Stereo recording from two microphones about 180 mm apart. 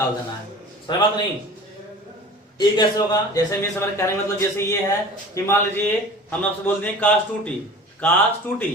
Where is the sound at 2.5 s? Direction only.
25° left (ahead or behind).